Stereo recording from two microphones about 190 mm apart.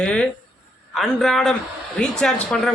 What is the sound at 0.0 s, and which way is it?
A man's voice, 5° left (ahead or behind).